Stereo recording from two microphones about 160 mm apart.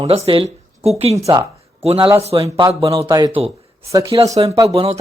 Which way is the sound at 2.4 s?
25° right (ahead or behind).